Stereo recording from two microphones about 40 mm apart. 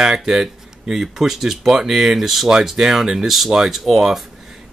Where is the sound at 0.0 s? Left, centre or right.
Centre.